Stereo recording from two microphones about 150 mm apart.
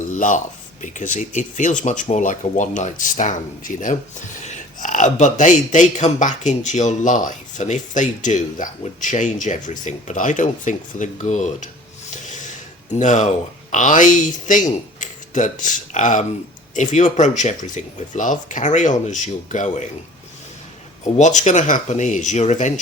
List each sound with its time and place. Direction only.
0.2 s a man's voice: 55° left (ahead or behind)
12.1 s snort: 55° left (ahead or behind)
12.9 s a man's voice: 55° left (ahead or behind)
21.2 s speech: 55° left (ahead or behind)